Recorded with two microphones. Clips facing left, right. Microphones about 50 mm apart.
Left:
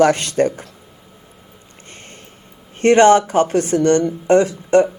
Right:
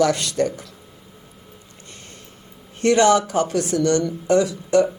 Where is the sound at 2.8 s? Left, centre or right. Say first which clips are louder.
Left 5 dB; left.